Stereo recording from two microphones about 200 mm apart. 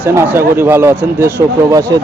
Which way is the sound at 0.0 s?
10° right (ahead or behind).